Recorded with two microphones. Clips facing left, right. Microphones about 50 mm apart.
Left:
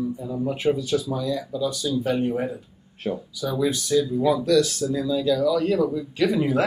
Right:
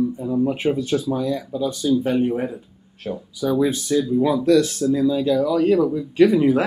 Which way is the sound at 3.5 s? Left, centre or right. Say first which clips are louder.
Right 1 dB; right.